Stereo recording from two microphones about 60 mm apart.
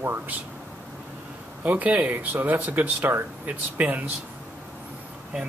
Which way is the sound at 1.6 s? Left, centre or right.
Right.